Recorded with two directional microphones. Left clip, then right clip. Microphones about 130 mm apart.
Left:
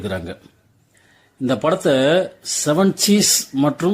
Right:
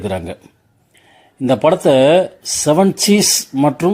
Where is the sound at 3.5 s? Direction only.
5° right (ahead or behind).